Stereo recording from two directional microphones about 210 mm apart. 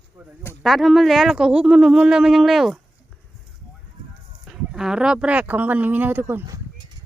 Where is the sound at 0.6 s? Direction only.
Centre (ahead or behind).